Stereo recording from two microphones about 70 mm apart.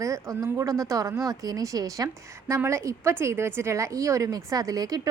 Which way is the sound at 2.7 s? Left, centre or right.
Right.